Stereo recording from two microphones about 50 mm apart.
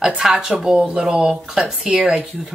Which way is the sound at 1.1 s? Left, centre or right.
Right.